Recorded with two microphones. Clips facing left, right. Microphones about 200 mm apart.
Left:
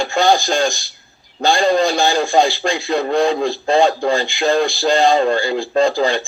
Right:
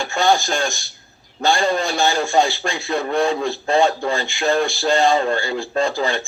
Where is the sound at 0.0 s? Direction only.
35° left (ahead or behind).